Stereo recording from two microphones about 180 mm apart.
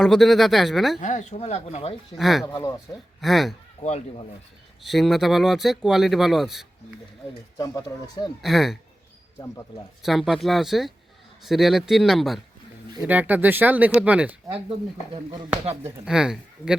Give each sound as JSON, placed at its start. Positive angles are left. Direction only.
{"t": 0.0, "sound": "speech", "side_deg": 0}
{"t": 1.0, "sound": "speech", "side_deg": 40}
{"t": 2.1, "sound": "speech", "side_deg": 0}
{"t": 2.5, "sound": "speech", "side_deg": 25}
{"t": 3.2, "sound": "speech", "side_deg": 0}
{"t": 3.8, "sound": "speech", "side_deg": 35}
{"t": 4.8, "sound": "speech", "side_deg": 0}
{"t": 7.6, "sound": "speech", "side_deg": 20}
{"t": 8.4, "sound": "speech", "side_deg": 0}
{"t": 10.0, "sound": "speech", "side_deg": 0}
{"t": 16.0, "sound": "speech", "side_deg": -5}